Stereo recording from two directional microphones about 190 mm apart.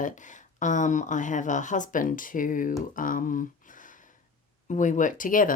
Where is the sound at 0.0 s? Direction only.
40° left (ahead or behind).